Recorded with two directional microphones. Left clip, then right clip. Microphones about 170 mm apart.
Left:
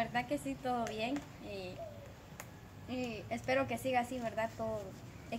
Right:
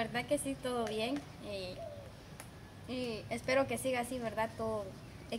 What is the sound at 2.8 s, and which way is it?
A woman's voice, 30° right (ahead or behind).